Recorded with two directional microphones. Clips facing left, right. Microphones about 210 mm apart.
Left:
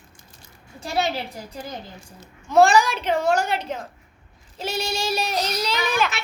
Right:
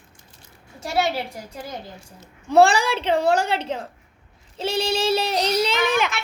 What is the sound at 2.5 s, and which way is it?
A woman's voice, 30° right (ahead or behind).